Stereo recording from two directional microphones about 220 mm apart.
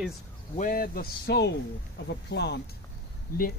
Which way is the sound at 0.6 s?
40° left (ahead or behind).